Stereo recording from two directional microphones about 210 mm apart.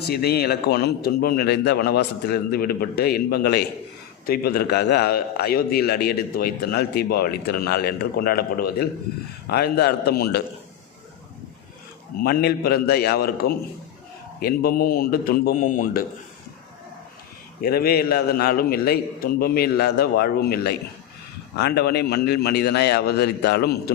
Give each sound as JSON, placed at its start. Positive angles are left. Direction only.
{"t": 0.1, "sound": "a man's voice", "side_deg": 50}
{"t": 12.2, "sound": "a man's voice", "side_deg": 50}
{"t": 17.6, "sound": "a man's voice", "side_deg": 45}